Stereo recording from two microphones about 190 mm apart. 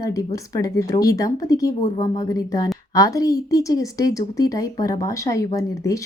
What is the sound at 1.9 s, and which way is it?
Speech, 35° left (ahead or behind).